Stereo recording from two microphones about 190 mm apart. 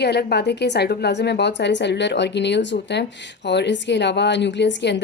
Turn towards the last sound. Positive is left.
turn(degrees=65)  # may be behind; listen again after turning